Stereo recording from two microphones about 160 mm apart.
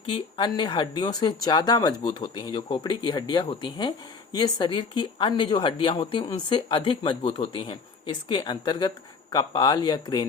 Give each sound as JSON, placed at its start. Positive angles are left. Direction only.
{"t": 0.0, "sound": "speech", "side_deg": 30}